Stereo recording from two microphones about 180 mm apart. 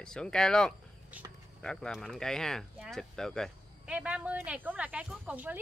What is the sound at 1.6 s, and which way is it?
Speech, 5° left (ahead or behind).